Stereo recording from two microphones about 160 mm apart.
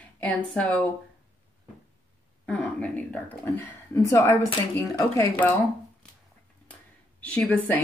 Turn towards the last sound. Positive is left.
turn(degrees=10)  # may be behind; listen again after turning